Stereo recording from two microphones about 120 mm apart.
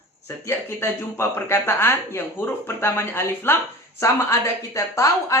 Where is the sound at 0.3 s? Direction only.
20° left (ahead or behind).